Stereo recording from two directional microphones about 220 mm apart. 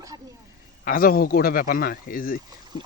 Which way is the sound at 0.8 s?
40° left (ahead or behind).